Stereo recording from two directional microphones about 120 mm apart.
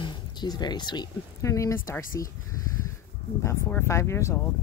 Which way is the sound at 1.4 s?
25° left (ahead or behind).